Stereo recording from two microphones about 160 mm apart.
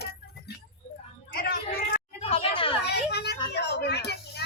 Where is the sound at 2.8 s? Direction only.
90° left.